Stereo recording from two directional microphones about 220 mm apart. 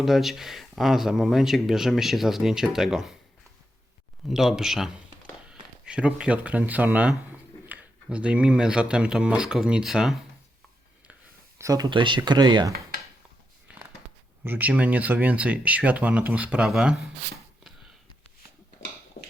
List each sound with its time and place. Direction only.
0.0 s speech: centre (ahead or behind)
4.3 s speech: centre (ahead or behind)
11.1 s speech: 15° right (ahead or behind)
14.4 s speech: 10° right (ahead or behind)